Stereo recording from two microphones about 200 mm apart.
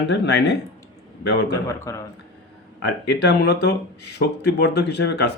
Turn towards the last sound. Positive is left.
turn(degrees=55)  # may be behind; listen again after turning